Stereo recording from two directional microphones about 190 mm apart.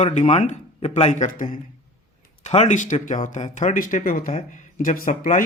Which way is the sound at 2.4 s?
35° left (ahead or behind).